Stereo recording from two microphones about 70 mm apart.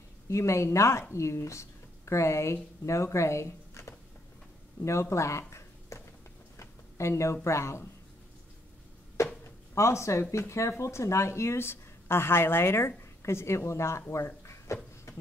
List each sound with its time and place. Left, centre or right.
0.3 s a woman's voice: left
5.1 s a woman's voice: left
5.5 s a sound: left
7.4 s speech: left
9.1 s a sound: left
10.3 s a woman's voice: left